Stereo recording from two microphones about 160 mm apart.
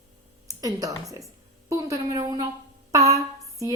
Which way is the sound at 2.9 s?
20° right (ahead or behind).